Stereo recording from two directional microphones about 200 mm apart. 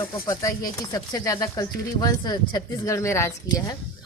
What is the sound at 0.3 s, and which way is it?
A woman's voice, 15° left (ahead or behind).